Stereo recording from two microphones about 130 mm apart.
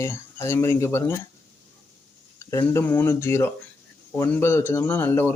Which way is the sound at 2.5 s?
20° left (ahead or behind).